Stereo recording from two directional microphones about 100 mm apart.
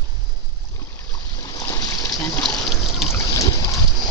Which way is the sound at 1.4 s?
35° left (ahead or behind).